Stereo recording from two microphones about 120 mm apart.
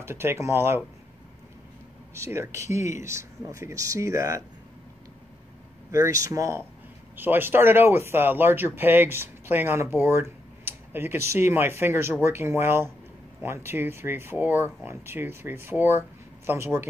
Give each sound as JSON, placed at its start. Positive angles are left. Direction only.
{"t": 0.0, "sound": "speech", "side_deg": -20}
{"t": 2.1, "sound": "speech", "side_deg": -20}
{"t": 5.9, "sound": "speech", "side_deg": -25}